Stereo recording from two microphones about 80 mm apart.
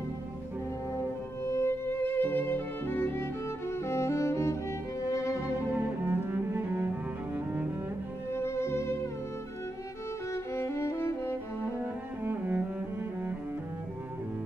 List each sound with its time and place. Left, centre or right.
0.9 s music: left
5.7 s cello: right
8.3 s music: left
10.3 s music: left
11.8 s cello: right